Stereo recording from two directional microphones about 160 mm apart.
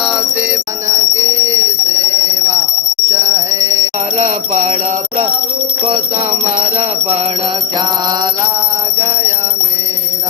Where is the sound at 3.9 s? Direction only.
45° right (ahead or behind).